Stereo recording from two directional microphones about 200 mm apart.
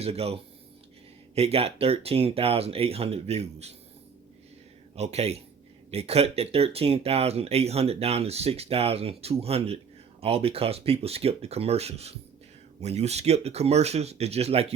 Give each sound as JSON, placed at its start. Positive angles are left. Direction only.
{"t": 0.0, "sound": "speech", "side_deg": -30}
{"t": 1.4, "sound": "speech", "side_deg": -30}
{"t": 4.9, "sound": "speech", "side_deg": -30}